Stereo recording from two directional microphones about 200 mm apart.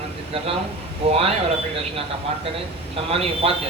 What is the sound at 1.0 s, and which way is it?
Speech, 30° right (ahead or behind).